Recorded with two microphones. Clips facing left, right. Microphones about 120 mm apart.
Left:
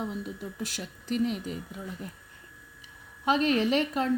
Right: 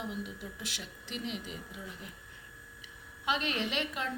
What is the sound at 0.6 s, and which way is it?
Speech, 40° left (ahead or behind).